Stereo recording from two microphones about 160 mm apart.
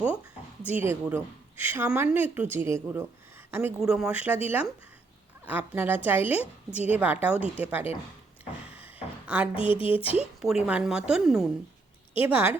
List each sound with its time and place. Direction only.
0.6 s a woman's voice: 10° right (ahead or behind)
8.7 s a sound: 10° right (ahead or behind)
9.2 s a woman's voice: 10° right (ahead or behind)
9.6 s speech: 35° left (ahead or behind)
10.4 s a woman's voice: 5° right (ahead or behind)